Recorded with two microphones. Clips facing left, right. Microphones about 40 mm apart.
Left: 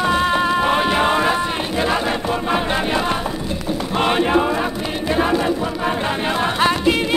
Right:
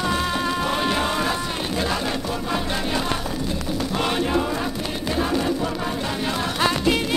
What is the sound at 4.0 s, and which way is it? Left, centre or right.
Chant, left.